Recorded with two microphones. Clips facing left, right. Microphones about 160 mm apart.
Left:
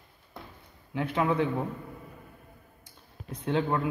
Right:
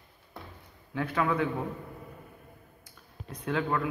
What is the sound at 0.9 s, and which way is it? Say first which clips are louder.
Speech: left 1 dB; 20° left (ahead or behind).